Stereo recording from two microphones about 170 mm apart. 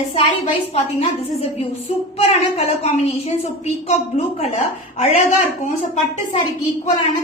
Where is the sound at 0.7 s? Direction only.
35° left (ahead or behind).